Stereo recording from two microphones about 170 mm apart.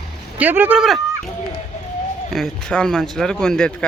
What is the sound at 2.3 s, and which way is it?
Speech, 5° left (ahead or behind).